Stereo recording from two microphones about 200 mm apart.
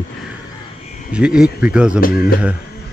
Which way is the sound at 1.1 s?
5° right (ahead or behind).